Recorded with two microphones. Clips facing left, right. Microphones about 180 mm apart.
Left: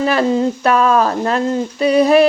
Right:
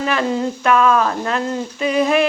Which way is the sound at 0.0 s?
35° left (ahead or behind).